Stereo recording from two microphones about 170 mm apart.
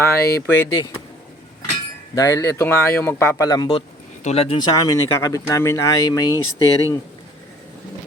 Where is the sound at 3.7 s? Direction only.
40° left (ahead or behind); by 7.0 s 20° left (ahead or behind).